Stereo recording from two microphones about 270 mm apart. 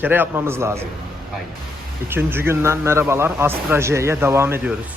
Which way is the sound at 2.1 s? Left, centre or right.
Centre.